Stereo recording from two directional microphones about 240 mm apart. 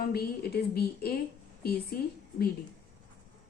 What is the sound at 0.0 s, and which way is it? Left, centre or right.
A woman's voice, left.